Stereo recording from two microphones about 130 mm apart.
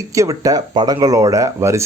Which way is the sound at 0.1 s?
25° right (ahead or behind).